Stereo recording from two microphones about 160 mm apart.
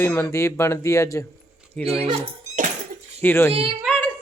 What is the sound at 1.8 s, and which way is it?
Speech, 40° right (ahead or behind).